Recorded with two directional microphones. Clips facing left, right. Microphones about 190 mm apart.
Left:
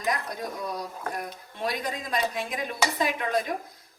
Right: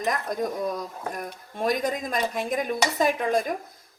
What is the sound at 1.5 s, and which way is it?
Speech, 45° right (ahead or behind).